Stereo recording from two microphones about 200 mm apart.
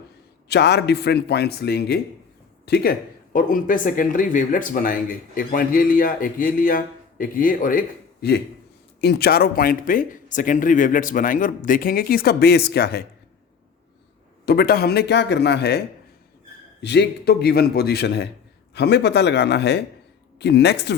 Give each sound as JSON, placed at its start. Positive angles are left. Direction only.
{"t": 0.4, "sound": "speech", "side_deg": 55}
{"t": 14.4, "sound": "speech", "side_deg": 50}
{"t": 16.8, "sound": "speech", "side_deg": 60}